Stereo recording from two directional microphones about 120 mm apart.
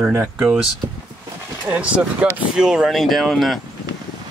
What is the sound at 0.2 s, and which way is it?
Speech, 5° right (ahead or behind).